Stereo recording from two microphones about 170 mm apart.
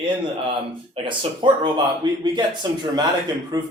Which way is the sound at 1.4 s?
30° right (ahead or behind).